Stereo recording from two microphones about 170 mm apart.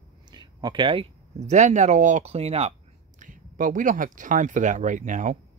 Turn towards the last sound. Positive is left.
turn(degrees=-45)  # may be behind; listen again after turning